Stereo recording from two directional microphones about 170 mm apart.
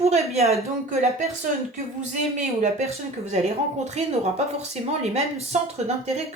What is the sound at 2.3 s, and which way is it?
Speech, 45° right (ahead or behind).